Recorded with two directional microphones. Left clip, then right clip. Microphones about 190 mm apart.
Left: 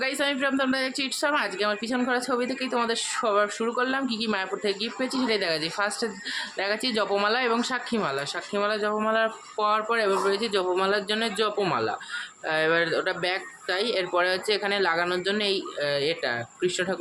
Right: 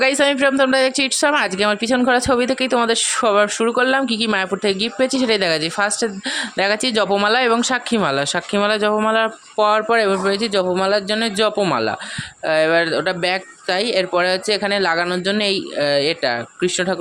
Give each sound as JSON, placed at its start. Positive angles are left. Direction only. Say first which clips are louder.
{"t": 0.0, "sound": "speech", "louder": "right 11 dB", "side_deg": -40}